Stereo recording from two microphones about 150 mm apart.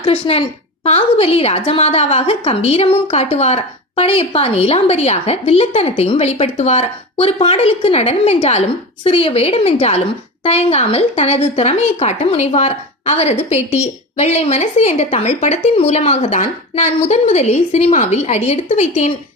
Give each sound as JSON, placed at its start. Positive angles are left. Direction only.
{"t": 0.0, "sound": "a woman's voice", "side_deg": 40}